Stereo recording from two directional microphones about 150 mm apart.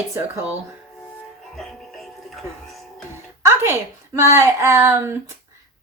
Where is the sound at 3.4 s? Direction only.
15° right (ahead or behind).